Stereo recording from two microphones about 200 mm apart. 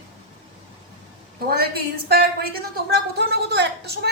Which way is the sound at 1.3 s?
50° right (ahead or behind).